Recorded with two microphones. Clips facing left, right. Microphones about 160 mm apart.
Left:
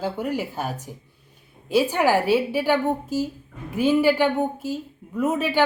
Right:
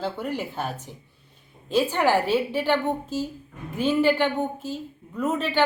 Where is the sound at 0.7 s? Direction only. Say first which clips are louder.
Left 3 dB; 40° left (ahead or behind).